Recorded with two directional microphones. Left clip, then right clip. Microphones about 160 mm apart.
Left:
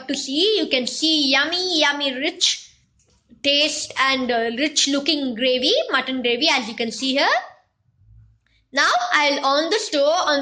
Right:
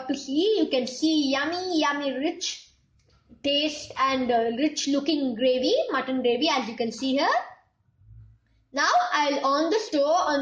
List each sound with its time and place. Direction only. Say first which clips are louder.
0.1 s a woman's voice: left 5 dB; 10° left (ahead or behind)
8.7 s a woman's voice: left 4 dB; 5° left (ahead or behind)